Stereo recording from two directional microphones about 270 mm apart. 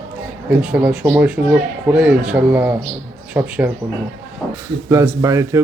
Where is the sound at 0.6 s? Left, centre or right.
Centre.